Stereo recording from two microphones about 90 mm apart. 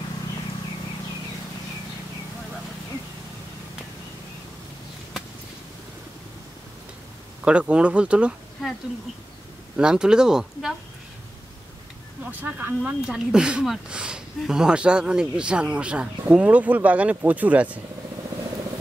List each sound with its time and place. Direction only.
7.4 s speech: 10° right (ahead or behind)
9.8 s speech: 10° right (ahead or behind)
12.3 s speech: 20° right (ahead or behind)
13.0 s speech: 10° right (ahead or behind)